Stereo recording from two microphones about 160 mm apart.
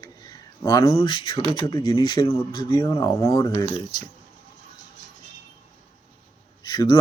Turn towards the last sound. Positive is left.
turn(degrees=25)  # may be behind; listen again after turning